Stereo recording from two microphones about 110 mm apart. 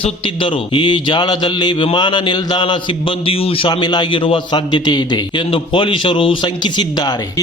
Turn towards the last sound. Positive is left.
turn(degrees=40)  # may be behind; listen again after turning